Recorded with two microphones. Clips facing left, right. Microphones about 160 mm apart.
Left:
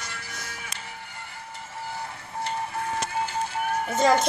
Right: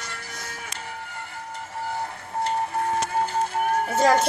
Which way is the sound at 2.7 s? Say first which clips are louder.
Right 4 dB; 45° right (ahead or behind).